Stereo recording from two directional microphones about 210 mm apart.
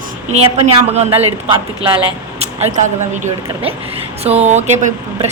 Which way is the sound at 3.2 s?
25° right (ahead or behind).